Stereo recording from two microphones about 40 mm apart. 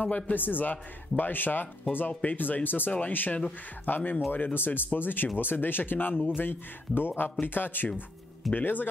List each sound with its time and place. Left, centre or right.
0.0 s a man's voice: left
0.4 s speech: left
6.5 s speech: left